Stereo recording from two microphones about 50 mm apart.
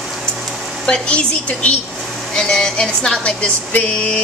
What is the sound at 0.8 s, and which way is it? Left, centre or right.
Speech, centre.